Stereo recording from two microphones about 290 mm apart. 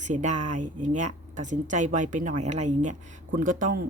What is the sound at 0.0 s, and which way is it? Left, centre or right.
A woman's voice, right.